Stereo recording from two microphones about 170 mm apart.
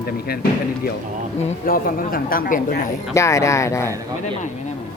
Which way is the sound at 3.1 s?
20° left (ahead or behind).